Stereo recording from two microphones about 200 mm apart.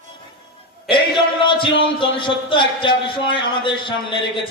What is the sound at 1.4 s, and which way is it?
Music, 25° left (ahead or behind).